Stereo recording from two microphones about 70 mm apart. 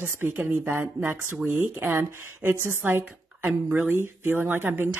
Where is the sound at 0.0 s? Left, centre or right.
Right.